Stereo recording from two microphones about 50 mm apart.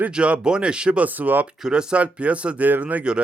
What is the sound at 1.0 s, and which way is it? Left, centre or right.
Speech, right.